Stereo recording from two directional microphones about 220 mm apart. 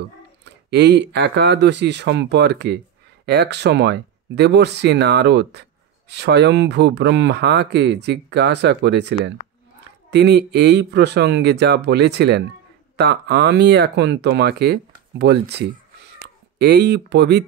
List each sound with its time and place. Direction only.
0.0 s speech: 50° right (ahead or behind)